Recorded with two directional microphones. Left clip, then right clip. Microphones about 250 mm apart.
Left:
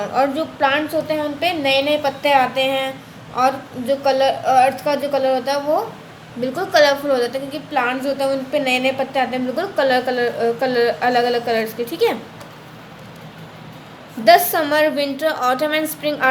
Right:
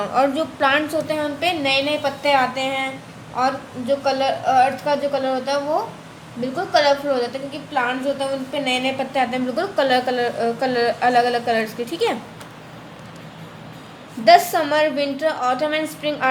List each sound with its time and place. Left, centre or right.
0.0 s a woman's voice: centre; by 8.9 s left
9.0 s a woman's voice: centre
14.3 s a woman's voice: centre